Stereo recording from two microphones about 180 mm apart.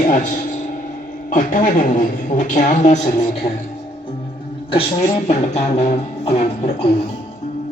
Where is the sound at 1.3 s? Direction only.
45° left (ahead or behind).